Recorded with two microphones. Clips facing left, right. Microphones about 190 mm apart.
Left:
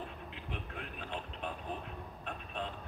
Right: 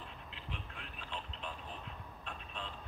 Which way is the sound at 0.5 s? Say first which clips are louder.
Left 5 dB; 55° left (ahead or behind).